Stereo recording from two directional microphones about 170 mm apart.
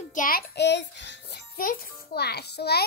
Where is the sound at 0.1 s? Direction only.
55° left (ahead or behind).